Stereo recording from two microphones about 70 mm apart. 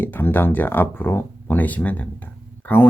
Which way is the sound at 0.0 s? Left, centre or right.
Left.